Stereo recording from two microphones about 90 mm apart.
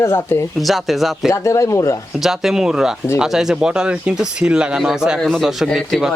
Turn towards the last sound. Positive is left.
turn(degrees=0)  # may be behind; listen again after turning